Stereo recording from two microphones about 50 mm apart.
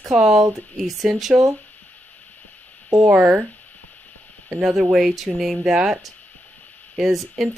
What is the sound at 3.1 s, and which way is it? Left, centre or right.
Speech, right.